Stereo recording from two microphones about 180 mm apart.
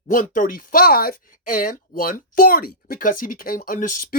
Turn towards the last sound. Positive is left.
turn(degrees=50)  # may be behind; listen again after turning